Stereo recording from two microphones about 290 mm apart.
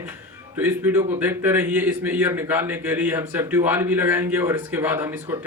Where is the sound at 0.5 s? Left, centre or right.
Centre.